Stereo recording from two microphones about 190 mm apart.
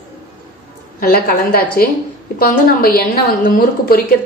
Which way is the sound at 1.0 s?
50° left (ahead or behind).